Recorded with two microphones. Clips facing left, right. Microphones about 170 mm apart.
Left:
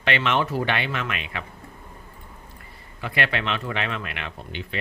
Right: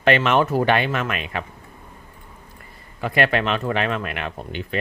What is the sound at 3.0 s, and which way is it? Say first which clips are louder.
Speech: right 6 dB; 45° right (ahead or behind).